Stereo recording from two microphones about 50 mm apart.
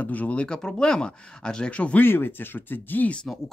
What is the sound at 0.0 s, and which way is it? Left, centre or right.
Speech, left.